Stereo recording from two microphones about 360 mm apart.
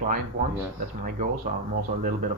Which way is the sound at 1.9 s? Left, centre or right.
Right.